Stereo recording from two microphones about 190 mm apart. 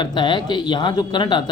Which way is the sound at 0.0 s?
25° left (ahead or behind).